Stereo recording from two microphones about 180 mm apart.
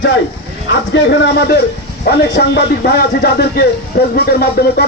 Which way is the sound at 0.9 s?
75° left (ahead or behind).